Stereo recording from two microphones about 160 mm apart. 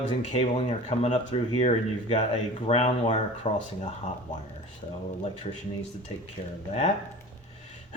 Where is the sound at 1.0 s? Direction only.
40° left (ahead or behind).